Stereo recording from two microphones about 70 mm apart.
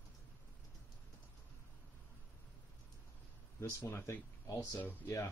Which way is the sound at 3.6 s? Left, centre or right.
Left.